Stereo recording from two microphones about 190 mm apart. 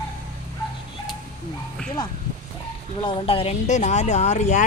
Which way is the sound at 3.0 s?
30° left (ahead or behind).